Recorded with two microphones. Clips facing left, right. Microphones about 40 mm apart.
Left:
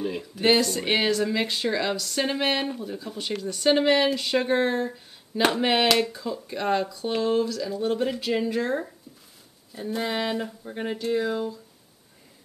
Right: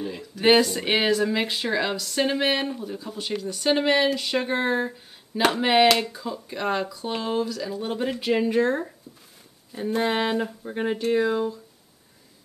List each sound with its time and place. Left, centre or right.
0.0 s speech: centre
0.4 s speech: centre; by 10.4 s right
10.4 s speech: centre